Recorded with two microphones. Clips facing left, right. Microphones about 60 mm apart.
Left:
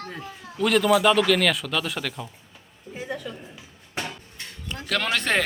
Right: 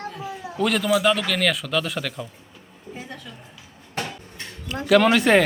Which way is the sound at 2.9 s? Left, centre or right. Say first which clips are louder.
Left 5 dB; centre.